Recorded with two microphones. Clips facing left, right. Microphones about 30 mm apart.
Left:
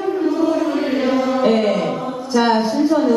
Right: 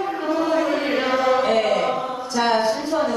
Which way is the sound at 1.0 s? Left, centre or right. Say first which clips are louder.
Right 1 dB; centre.